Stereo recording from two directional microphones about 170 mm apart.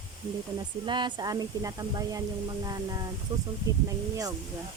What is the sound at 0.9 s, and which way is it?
Speech, 25° right (ahead or behind).